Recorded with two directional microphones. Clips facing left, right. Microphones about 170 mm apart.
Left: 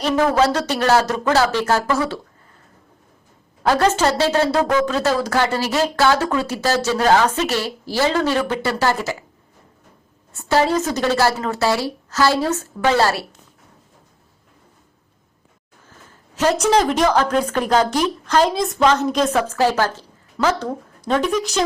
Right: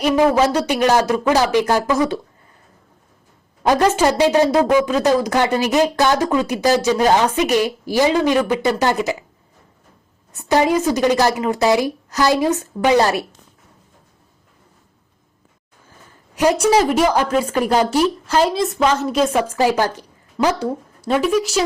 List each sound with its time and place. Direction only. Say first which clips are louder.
0.0 s speech: right 2 dB; 10° right (ahead or behind)
3.6 s speech: right 2 dB; 15° right (ahead or behind)
10.3 s speech: right 2 dB; 15° right (ahead or behind)
16.3 s speech: right 2 dB; 15° right (ahead or behind)